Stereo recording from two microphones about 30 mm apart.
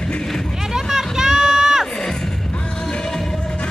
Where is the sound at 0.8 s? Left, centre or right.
Centre.